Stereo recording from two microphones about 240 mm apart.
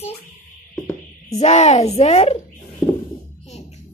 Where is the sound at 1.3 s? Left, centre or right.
Left.